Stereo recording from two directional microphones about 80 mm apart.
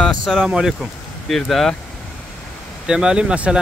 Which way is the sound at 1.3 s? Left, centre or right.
Centre.